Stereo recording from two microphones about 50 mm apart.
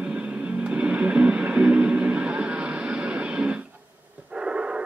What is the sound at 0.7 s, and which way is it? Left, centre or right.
Music, right.